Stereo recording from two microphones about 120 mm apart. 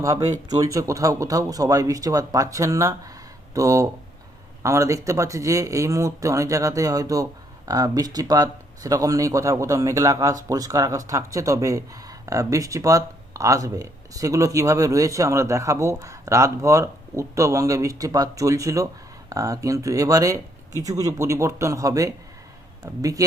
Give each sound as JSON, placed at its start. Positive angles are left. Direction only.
{"t": 0.0, "sound": "speech", "side_deg": -25}